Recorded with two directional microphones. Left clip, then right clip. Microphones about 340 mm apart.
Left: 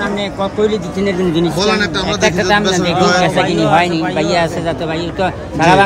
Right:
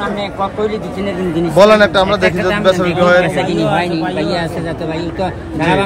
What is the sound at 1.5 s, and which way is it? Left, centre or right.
A man's voice, centre.